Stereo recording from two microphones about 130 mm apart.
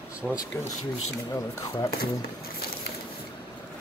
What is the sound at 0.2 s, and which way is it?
Speech, 5° left (ahead or behind).